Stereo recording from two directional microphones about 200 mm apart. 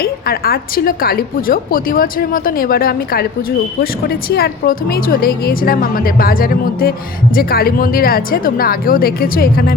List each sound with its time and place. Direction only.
0.0 s a woman's voice: 50° left (ahead or behind)